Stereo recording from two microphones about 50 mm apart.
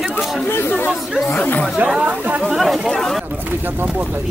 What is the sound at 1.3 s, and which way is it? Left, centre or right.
Speech, left.